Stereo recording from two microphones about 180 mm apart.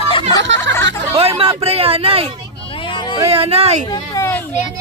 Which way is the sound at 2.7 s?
25° left (ahead or behind).